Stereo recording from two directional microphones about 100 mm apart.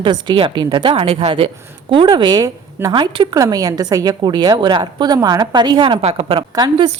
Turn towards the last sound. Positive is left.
turn(degrees=-45)  # may be behind; listen again after turning